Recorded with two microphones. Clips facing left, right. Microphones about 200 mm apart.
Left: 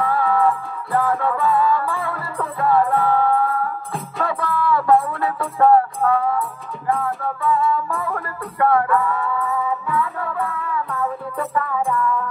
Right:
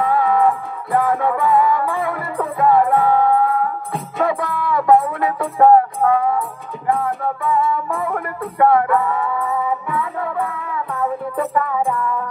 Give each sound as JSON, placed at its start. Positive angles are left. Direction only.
{"t": 0.0, "sound": "music", "side_deg": -15}